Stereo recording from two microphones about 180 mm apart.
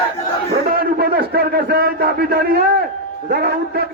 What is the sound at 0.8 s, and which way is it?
A man's voice, 55° right (ahead or behind).